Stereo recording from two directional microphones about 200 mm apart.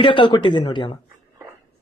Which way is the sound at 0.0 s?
25° left (ahead or behind).